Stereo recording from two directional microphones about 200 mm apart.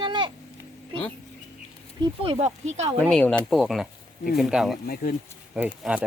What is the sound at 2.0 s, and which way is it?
Speech, 25° right (ahead or behind).